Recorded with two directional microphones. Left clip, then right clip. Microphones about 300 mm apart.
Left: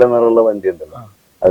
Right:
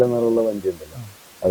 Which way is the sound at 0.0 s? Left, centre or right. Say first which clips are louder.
Left 8 dB; centre.